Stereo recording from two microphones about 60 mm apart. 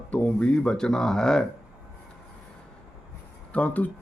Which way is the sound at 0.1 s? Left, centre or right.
Left.